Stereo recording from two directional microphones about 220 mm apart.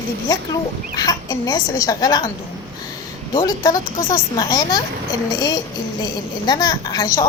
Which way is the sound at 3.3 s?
15° left (ahead or behind).